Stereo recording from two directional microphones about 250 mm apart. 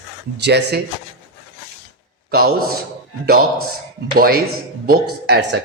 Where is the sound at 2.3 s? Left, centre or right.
Right.